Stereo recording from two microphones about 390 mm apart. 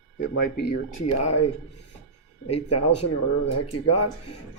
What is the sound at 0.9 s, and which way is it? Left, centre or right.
Speech, left.